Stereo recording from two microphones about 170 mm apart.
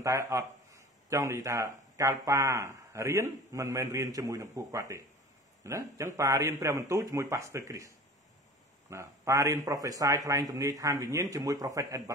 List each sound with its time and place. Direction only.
0.0 s speech: 20° right (ahead or behind)
8.9 s a man's voice: 20° right (ahead or behind)